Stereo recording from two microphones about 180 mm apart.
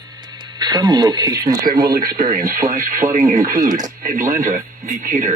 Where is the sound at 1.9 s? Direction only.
55° right (ahead or behind).